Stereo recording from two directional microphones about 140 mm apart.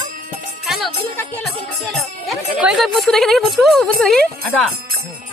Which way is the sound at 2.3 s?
5° right (ahead or behind).